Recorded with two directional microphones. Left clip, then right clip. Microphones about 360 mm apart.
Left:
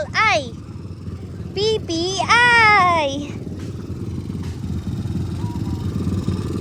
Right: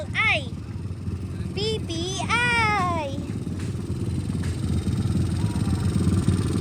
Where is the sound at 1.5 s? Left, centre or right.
Left.